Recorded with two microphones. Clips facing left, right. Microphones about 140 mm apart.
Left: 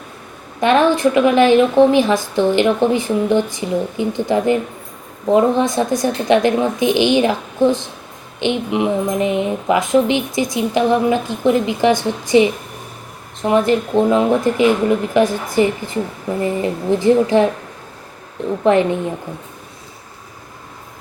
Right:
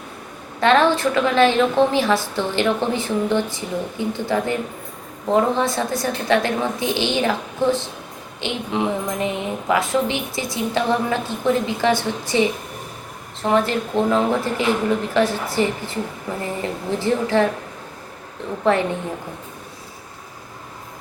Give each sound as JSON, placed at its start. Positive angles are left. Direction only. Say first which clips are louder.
{"t": 0.6, "sound": "a woman's voice", "louder": "left 3 dB", "side_deg": 15}
{"t": 17.0, "sound": "a woman's voice", "louder": "left 5 dB", "side_deg": 15}
{"t": 18.6, "sound": "a woman's voice", "louder": "left 5 dB", "side_deg": 20}